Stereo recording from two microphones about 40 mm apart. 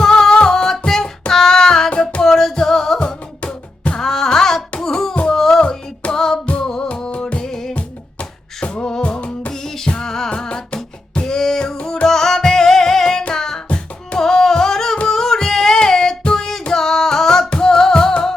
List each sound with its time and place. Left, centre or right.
0.0 s music: centre
0.9 s a sound: centre
1.3 s child singing: centre
2.2 s music: centre; by 7.4 s left
7.4 s music: centre
7.7 s music: left
8.8 s music: left
9.0 s music: left
9.5 s music: centre